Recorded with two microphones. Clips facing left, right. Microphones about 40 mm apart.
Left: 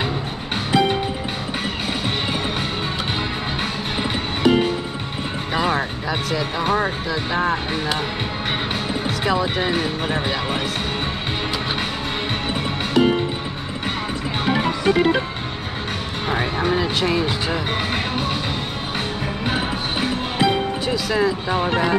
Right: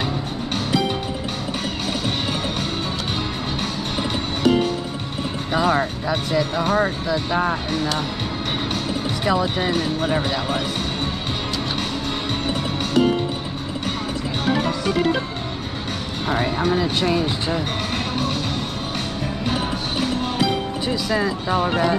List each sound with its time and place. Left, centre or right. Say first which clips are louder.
0.7 s music: left 4 dB; left
4.4 s music: left 1 dB; centre
6.3 s music: right 1 dB; centre
9.2 s speech: even; centre
12.4 s music: even; centre
14.4 s music: left 2 dB; centre
17.9 s music: left 1 dB; centre
19.4 s music: left 1 dB; left
21.1 s speech: left 1 dB; centre